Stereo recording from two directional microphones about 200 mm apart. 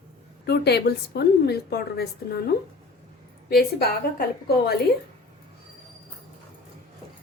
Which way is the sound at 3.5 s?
50° left (ahead or behind).